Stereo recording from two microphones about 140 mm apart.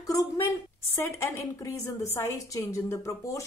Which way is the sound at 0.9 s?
20° left (ahead or behind).